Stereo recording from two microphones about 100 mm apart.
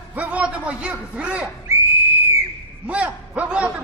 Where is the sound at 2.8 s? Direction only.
10° right (ahead or behind).